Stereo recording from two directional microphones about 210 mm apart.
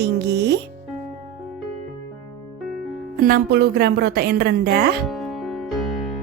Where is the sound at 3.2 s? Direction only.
45° right (ahead or behind).